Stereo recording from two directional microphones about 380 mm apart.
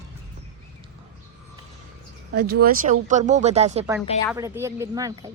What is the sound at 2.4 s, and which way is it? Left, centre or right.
Speech, right.